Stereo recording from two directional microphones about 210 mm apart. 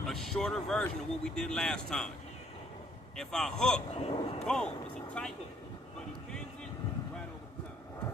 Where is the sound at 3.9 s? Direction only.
25° left (ahead or behind).